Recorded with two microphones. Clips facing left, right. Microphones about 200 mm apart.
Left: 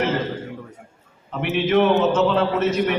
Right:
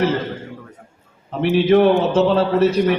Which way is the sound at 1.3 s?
35° right (ahead or behind).